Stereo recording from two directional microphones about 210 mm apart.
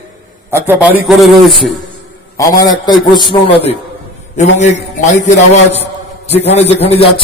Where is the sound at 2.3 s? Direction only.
20° left (ahead or behind).